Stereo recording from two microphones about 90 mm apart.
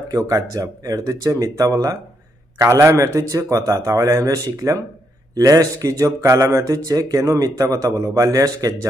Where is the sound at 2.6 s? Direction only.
35° right (ahead or behind).